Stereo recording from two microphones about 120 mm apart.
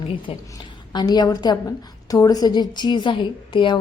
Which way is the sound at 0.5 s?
35° left (ahead or behind).